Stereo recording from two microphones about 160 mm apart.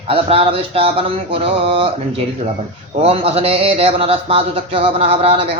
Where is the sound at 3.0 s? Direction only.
35° right (ahead or behind).